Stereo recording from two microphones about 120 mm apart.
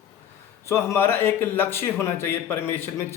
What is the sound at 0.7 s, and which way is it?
A man's voice, 20° left (ahead or behind).